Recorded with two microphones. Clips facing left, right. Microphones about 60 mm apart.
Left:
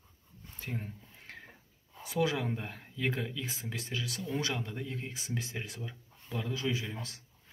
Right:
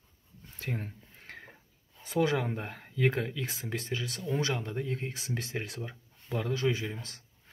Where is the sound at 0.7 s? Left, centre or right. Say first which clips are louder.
Right 2 dB; right.